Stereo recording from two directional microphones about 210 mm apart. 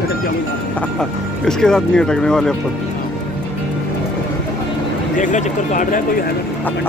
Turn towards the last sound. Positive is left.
turn(degrees=40)  # may be behind; listen again after turning